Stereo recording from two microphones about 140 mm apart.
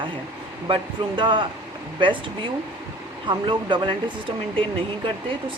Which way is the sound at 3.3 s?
35° right (ahead or behind).